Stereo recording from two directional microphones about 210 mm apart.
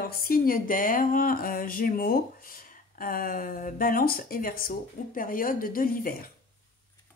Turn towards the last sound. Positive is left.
turn(degrees=45)  # may be behind; listen again after turning